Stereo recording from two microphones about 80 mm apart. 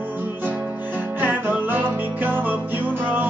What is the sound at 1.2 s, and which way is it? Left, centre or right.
Music, right.